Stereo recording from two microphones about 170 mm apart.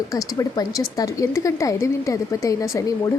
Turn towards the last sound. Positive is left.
turn(degrees=20)  # may be behind; listen again after turning